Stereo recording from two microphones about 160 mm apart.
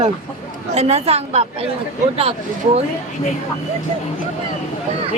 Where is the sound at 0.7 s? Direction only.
40° right (ahead or behind).